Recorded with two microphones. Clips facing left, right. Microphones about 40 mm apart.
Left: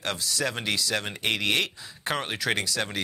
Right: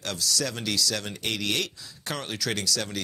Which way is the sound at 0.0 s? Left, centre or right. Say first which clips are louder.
Left 1 dB; left.